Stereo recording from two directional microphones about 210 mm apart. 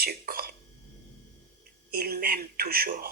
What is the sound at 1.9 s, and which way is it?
A woman's voice, 45° right (ahead or behind).